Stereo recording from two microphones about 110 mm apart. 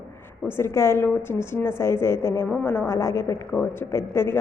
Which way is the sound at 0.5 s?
25° left (ahead or behind).